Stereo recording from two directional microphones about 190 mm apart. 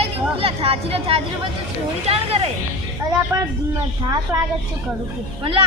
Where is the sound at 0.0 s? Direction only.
30° right (ahead or behind).